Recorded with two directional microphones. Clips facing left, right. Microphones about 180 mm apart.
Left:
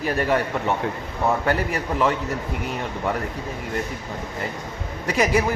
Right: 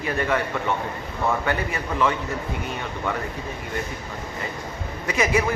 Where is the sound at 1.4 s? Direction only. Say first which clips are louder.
Left 3 dB; 40° left (ahead or behind).